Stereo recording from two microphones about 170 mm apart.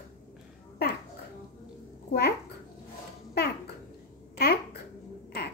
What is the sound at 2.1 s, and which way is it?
Speech, 70° left (ahead or behind).